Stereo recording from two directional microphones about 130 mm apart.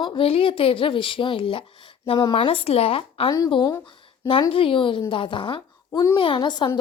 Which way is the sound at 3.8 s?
40° left (ahead or behind).